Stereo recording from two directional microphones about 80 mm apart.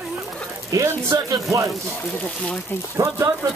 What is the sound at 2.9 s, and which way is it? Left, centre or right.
Speech, right.